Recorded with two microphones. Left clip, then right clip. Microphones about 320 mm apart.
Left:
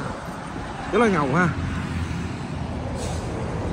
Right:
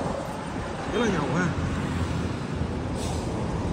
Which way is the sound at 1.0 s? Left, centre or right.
Left.